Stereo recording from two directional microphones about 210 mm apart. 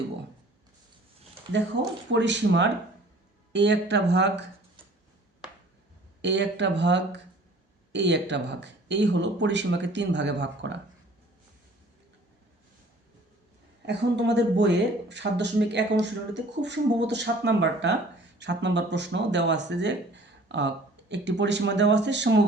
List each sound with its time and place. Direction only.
2.0 s speech: 55° right (ahead or behind)
6.2 s speech: 55° right (ahead or behind)
13.8 s speech: 55° right (ahead or behind)